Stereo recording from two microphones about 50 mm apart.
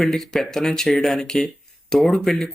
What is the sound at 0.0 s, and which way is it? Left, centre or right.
Speech, centre.